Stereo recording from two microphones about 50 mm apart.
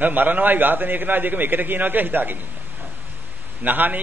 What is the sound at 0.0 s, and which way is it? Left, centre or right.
A man's voice, right.